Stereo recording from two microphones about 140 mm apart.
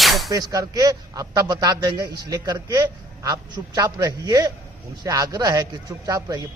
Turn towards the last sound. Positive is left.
turn(degrees=-25)  # may be behind; listen again after turning